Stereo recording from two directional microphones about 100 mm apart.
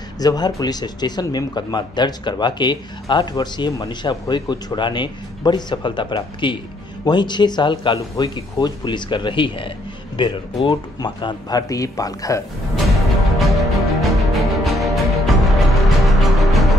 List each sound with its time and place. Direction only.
0.2 s speech: 40° left (ahead or behind)
12.7 s music: centre (ahead or behind)